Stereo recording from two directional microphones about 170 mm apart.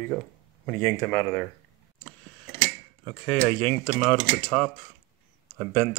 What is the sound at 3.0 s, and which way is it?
Speech, 5° left (ahead or behind).